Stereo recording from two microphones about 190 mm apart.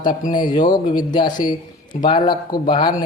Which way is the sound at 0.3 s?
25° left (ahead or behind).